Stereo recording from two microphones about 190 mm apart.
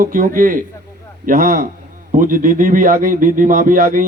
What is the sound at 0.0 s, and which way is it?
Speech, 45° right (ahead or behind).